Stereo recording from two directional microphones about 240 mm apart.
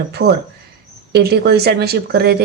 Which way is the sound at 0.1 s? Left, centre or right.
Right.